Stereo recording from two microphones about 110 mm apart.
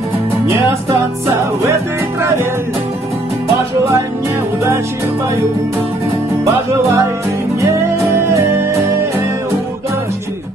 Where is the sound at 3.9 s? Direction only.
25° right (ahead or behind).